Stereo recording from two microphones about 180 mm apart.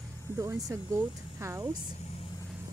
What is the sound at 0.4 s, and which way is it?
Speech, 15° right (ahead or behind).